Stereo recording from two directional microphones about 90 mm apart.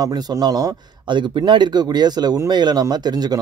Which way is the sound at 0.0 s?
45° right (ahead or behind).